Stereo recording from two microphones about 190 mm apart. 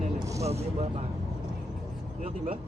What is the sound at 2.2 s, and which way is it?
Speech, 35° right (ahead or behind).